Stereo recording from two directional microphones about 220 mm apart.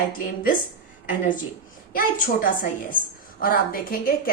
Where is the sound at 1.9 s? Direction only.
40° left (ahead or behind).